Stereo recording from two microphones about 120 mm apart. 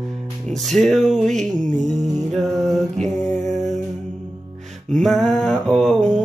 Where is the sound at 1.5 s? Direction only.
90° right.